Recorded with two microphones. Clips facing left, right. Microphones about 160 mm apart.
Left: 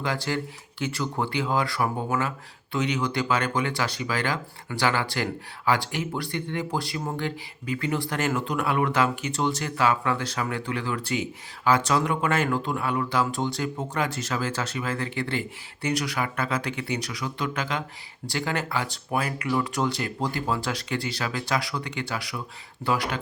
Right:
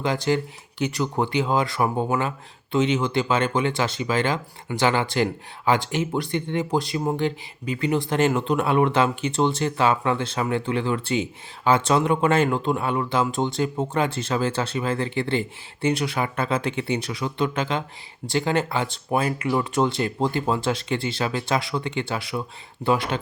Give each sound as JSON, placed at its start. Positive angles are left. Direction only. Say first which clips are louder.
{"t": 0.0, "sound": "speech", "louder": "right 5 dB", "side_deg": -20}